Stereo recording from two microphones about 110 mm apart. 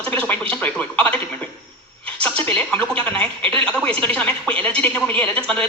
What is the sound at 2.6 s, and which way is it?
A man's voice, 15° left (ahead or behind).